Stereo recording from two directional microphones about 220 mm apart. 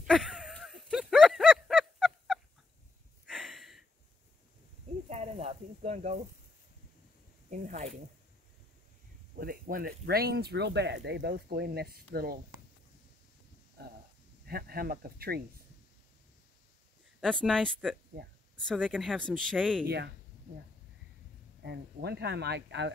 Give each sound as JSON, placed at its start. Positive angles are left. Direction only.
{"t": 0.0, "sound": "a sound", "side_deg": 0}
{"t": 5.1, "sound": "snake", "side_deg": -30}
{"t": 7.4, "sound": "speech", "side_deg": -35}
{"t": 9.3, "sound": "speech", "side_deg": -40}
{"t": 14.5, "sound": "speech", "side_deg": -45}
{"t": 17.2, "sound": "speech", "side_deg": 5}
{"t": 21.6, "sound": "speech", "side_deg": -45}